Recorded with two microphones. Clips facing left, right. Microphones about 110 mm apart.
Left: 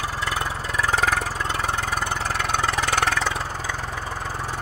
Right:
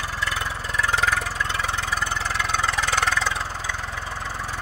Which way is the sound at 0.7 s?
40° left (ahead or behind).